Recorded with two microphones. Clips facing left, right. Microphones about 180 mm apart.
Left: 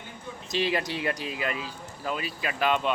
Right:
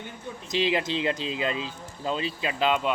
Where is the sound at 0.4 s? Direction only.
20° right (ahead or behind).